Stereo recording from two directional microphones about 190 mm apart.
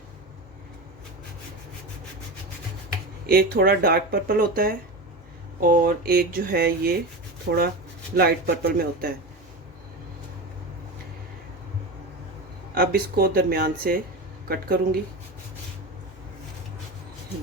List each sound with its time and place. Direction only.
3.2 s speech: 50° right (ahead or behind)
8.1 s speech: 55° right (ahead or behind)
12.7 s speech: 50° right (ahead or behind)